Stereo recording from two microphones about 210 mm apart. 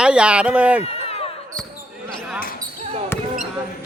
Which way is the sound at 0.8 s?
30° left (ahead or behind).